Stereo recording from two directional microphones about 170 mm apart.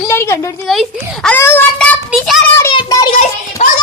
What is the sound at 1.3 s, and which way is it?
A child's voice, 10° left (ahead or behind).